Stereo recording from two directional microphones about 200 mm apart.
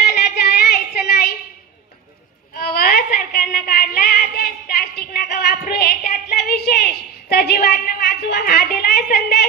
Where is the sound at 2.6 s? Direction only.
50° left (ahead or behind).